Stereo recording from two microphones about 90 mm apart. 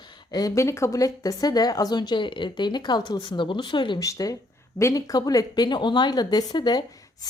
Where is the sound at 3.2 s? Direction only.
70° left (ahead or behind).